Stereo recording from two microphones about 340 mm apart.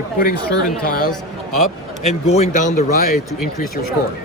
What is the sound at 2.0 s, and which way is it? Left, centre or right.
Speech, centre.